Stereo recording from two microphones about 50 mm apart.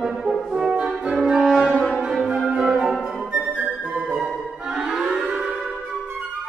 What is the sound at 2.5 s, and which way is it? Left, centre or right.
Music, centre.